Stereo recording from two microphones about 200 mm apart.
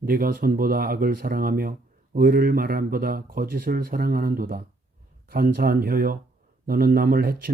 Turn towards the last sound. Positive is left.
turn(degrees=-45)  # may be behind; listen again after turning